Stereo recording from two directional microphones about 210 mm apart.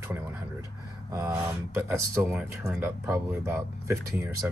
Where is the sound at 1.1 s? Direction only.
15° right (ahead or behind).